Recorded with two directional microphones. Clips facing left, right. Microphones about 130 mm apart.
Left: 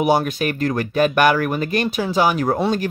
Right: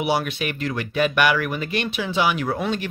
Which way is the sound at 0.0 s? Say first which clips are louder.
Left 5 dB; 45° left (ahead or behind).